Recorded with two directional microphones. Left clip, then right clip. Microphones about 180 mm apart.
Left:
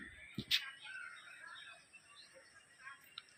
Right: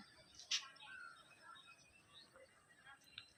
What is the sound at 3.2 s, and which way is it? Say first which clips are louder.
Music: even; 55° right (ahead or behind).